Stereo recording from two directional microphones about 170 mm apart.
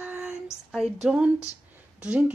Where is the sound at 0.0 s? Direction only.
10° right (ahead or behind).